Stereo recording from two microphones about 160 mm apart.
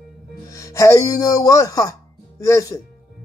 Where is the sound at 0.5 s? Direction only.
20° left (ahead or behind).